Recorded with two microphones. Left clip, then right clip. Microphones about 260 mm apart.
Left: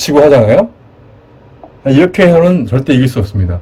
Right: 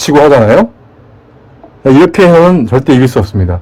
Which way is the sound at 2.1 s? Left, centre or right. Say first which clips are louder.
Right 3 dB; centre.